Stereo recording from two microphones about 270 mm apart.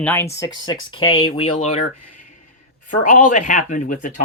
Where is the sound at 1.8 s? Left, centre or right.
Left.